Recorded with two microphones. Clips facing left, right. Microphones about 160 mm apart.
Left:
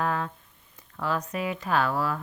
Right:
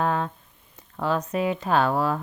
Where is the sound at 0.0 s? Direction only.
25° right (ahead or behind).